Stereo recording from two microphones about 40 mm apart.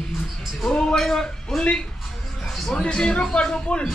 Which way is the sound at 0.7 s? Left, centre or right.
Centre.